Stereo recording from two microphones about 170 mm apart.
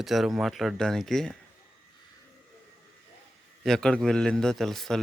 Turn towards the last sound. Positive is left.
turn(degrees=0)  # may be behind; listen again after turning